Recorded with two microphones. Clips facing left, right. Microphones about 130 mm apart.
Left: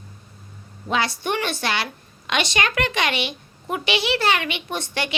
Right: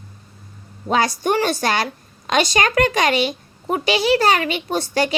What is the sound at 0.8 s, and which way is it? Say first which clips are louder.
A child's voice: right 5 dB; 40° right (ahead or behind).